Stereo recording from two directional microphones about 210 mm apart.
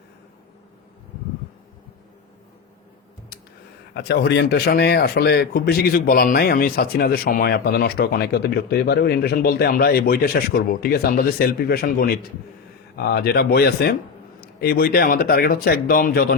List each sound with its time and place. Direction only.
3.9 s speech: 50° left (ahead or behind)